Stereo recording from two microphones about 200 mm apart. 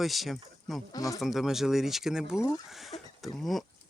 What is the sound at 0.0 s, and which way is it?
Speech, centre (ahead or behind).